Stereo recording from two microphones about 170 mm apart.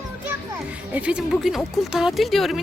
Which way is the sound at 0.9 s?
5° right (ahead or behind).